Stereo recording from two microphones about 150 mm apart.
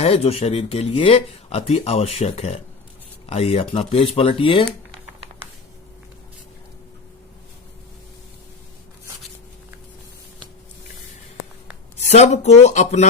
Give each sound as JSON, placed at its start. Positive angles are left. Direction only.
{"t": 0.0, "sound": "speech", "side_deg": 40}
{"t": 11.9, "sound": "speech", "side_deg": 50}